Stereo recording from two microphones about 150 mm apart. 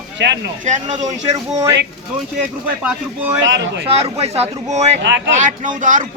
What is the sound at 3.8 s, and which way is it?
A man's voice, 45° right (ahead or behind).